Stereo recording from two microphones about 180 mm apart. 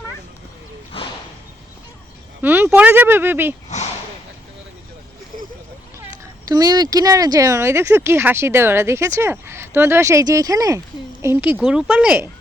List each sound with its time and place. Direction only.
2.4 s speech: 10° right (ahead or behind)
3.7 s a sound: 40° left (ahead or behind)
6.5 s speech: 20° right (ahead or behind)